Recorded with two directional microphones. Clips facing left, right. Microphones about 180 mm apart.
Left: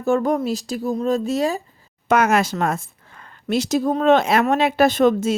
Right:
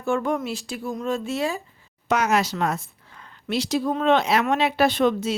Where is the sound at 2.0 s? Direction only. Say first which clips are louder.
Left 4 dB; 55° left (ahead or behind).